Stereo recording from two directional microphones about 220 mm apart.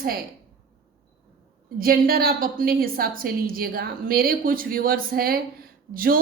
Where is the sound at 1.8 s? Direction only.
40° right (ahead or behind).